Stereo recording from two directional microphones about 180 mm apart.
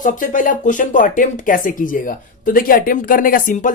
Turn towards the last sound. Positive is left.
turn(degrees=45)  # may be behind; listen again after turning